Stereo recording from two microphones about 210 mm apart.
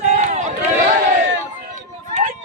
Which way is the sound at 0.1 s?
35° right (ahead or behind).